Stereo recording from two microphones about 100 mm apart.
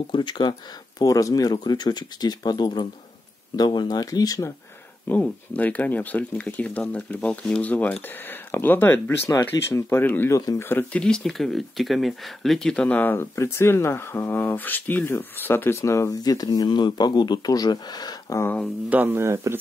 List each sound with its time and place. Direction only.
0.1 s speech: 50° left (ahead or behind)
5.0 s speech: 15° left (ahead or behind)
11.0 s speech: 5° left (ahead or behind); by 18.4 s 45° left (ahead or behind)
18.9 s speech: 20° right (ahead or behind)